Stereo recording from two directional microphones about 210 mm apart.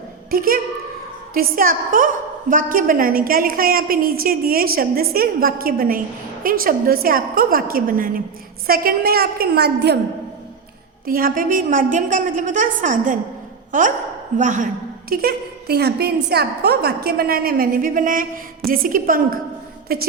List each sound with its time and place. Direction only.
0.3 s a woman's voice: 45° right (ahead or behind)
11.0 s a woman's voice: 45° right (ahead or behind)
14.3 s a woman's voice: 35° right (ahead or behind)
15.1 s a woman's voice: 45° right (ahead or behind)